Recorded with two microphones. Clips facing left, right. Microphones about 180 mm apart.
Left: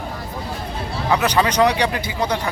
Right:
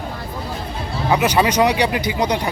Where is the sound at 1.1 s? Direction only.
15° right (ahead or behind).